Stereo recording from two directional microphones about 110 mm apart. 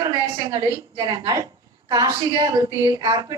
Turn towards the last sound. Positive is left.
turn(degrees=-40)  # may be behind; listen again after turning